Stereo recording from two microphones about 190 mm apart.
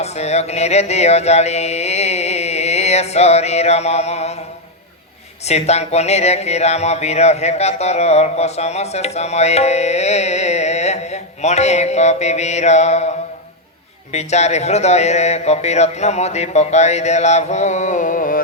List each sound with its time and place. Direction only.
0.0 s music: 35° left (ahead or behind)
5.5 s speech: 35° left (ahead or behind)